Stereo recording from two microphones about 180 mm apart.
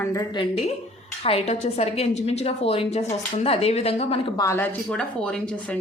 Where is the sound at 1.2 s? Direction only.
35° left (ahead or behind).